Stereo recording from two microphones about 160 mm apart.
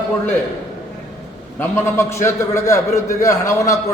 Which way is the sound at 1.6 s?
15° left (ahead or behind).